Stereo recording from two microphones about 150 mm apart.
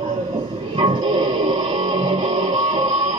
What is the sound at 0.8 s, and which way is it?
Music, 35° right (ahead or behind).